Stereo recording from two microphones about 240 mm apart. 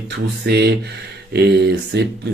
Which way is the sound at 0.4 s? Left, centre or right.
Right.